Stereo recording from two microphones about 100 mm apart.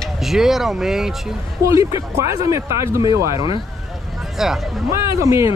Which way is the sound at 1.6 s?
30° right (ahead or behind).